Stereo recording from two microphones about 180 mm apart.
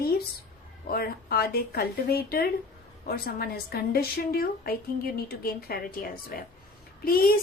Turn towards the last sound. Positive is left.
turn(degrees=55)  # may be behind; listen again after turning